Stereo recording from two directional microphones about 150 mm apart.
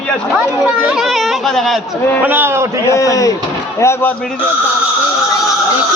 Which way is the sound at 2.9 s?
25° left (ahead or behind).